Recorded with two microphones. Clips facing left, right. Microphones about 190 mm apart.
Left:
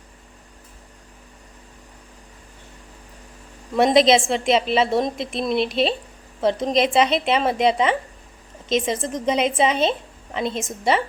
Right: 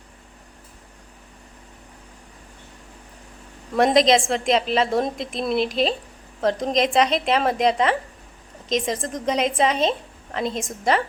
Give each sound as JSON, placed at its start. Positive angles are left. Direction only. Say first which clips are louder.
{"t": 3.8, "sound": "a woman's voice", "louder": "left 2 dB", "side_deg": 0}